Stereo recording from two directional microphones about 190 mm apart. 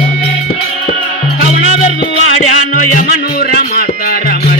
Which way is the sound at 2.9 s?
45° left (ahead or behind).